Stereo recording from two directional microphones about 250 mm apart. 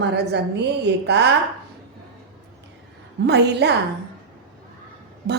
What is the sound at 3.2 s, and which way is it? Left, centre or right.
Speech, right.